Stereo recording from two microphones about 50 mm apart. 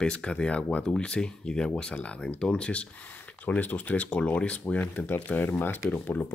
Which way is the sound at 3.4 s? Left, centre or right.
Left.